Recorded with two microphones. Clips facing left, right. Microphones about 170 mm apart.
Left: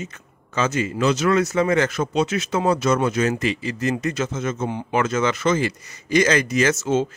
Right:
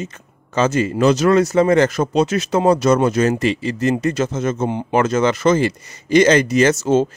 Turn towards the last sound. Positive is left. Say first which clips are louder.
# right 5 dB
turn(degrees=-35)  # may be behind; listen again after turning